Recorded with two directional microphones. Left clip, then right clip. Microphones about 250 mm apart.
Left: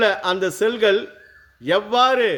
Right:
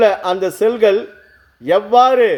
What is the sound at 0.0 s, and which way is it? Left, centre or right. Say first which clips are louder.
A man's voice: right 5 dB; centre.